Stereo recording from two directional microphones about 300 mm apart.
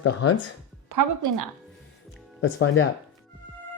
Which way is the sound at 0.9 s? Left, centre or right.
Right.